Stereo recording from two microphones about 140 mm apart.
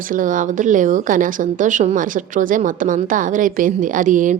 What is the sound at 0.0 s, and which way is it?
Speech, 70° right (ahead or behind).